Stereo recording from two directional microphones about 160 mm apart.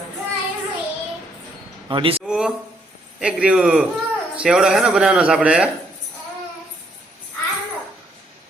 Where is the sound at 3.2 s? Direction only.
5° right (ahead or behind).